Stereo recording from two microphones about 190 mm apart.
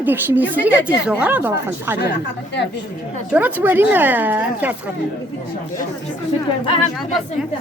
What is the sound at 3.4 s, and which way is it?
A woman's voice, 10° right (ahead or behind).